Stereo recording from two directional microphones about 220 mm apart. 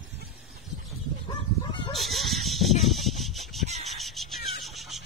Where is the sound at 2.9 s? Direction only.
Centre (ahead or behind).